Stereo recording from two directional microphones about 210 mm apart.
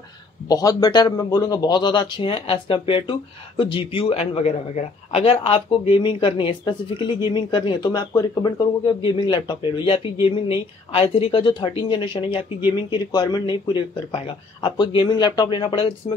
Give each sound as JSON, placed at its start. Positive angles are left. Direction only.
{"t": 0.5, "sound": "a man's voice", "side_deg": 15}